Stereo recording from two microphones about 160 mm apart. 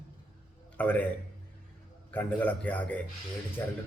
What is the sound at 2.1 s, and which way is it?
A man's voice, 10° left (ahead or behind).